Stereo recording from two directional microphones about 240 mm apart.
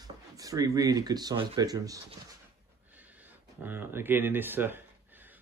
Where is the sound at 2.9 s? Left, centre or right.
Centre.